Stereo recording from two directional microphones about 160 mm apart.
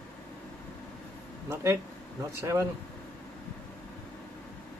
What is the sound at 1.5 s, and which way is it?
Speech, 15° right (ahead or behind).